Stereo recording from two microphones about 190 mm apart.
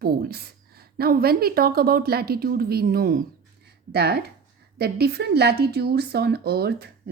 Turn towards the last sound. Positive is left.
turn(degrees=-55)  # may be behind; listen again after turning